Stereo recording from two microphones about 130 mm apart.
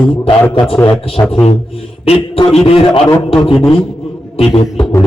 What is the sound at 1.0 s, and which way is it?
A man's voice, 45° left (ahead or behind).